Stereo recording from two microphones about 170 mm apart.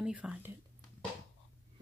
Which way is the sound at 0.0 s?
5° right (ahead or behind).